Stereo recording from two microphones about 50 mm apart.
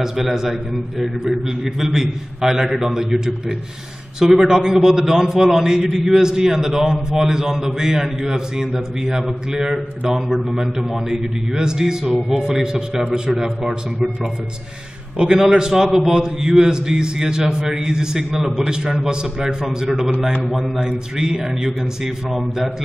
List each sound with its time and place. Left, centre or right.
0.0 s a man's voice: centre
1.6 s a man's voice: centre
2.0 s a man's voice: centre
15.1 s a man's voice: centre
21.2 s a man's voice: centre